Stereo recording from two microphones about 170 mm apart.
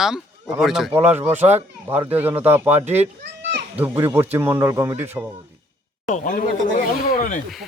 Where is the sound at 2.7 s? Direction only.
40° right (ahead or behind).